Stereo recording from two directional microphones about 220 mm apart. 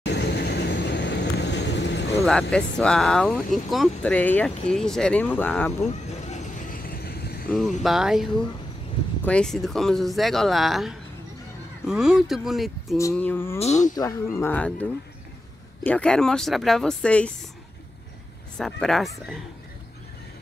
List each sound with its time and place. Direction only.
0.0 s vehicle: 50° left (ahead or behind)
2.5 s speech: 5° left (ahead or behind)
6.2 s a sound: 35° left (ahead or behind)
7.5 s speech: centre (ahead or behind)
13.6 s speech: 30° left (ahead or behind)
13.9 s speech: 15° left (ahead or behind)
18.6 s speech: centre (ahead or behind)